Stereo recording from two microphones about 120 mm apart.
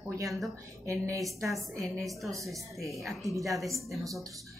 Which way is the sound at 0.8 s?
25° right (ahead or behind).